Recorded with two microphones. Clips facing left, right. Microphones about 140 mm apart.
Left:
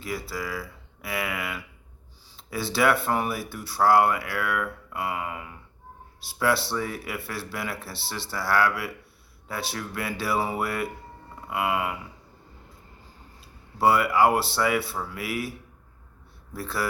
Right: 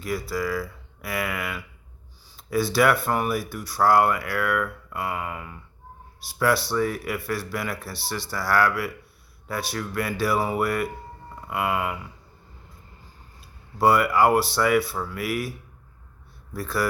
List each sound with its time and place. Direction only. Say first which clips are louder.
0.0 s speech: right 5 dB; 25° left (ahead or behind)
13.8 s speech: right 1 dB; 25° left (ahead or behind)
16.6 s speech: right 4 dB; 25° left (ahead or behind)